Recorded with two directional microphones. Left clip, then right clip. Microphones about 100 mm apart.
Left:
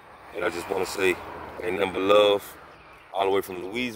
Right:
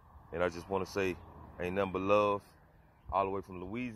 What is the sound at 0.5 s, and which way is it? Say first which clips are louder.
Speech: left 7 dB; 10° right (ahead or behind).